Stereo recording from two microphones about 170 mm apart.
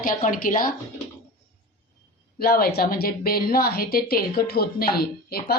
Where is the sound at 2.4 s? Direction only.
65° left (ahead or behind).